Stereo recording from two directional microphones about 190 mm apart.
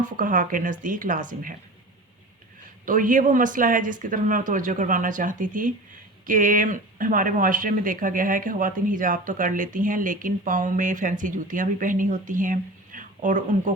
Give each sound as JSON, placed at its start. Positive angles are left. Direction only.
{"t": 0.0, "sound": "speech", "side_deg": -45}
{"t": 2.8, "sound": "speech", "side_deg": -45}